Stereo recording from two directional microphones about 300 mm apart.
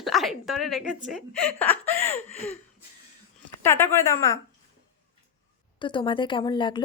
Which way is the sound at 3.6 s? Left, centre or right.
Centre.